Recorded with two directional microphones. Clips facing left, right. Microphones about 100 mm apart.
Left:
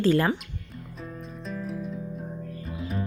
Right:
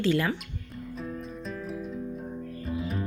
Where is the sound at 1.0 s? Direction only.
Centre (ahead or behind).